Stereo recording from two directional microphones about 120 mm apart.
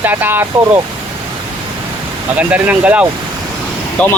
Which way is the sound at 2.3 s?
15° right (ahead or behind).